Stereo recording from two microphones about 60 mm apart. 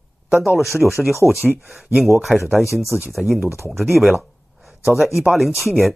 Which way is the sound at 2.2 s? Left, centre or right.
Centre.